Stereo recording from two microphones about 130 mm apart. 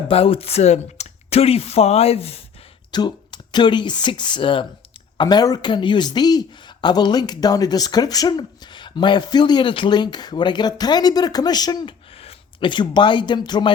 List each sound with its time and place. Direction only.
0.1 s speech: 45° left (ahead or behind)
2.9 s speech: 35° left (ahead or behind)
12.1 s speech: 50° left (ahead or behind)